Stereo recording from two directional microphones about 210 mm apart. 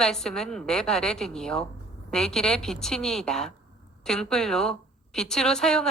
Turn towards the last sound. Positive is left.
turn(degrees=5)  # may be behind; listen again after turning